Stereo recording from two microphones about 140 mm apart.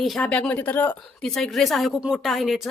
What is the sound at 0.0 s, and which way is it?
Speech, 5° left (ahead or behind).